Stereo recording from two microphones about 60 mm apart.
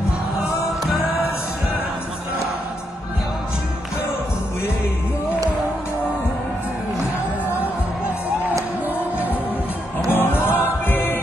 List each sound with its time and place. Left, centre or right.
10.1 s music: left